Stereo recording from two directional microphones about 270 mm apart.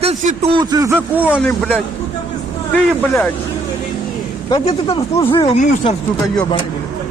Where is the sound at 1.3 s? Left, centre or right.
Centre.